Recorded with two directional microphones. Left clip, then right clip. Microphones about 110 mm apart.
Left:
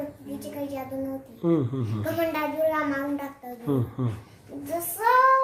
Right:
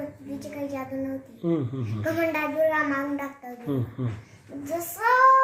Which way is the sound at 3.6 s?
45° left (ahead or behind).